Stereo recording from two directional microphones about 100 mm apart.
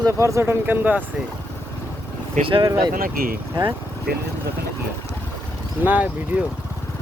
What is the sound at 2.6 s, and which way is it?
Speech, 40° right (ahead or behind).